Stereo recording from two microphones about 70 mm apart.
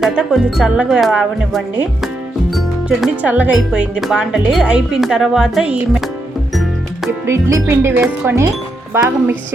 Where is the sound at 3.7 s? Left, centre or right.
Centre.